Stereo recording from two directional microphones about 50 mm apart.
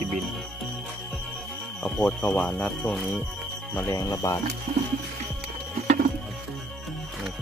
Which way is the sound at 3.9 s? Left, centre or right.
Left.